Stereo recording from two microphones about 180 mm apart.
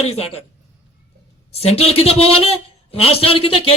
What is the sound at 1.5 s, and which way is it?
A man's voice, 35° left (ahead or behind).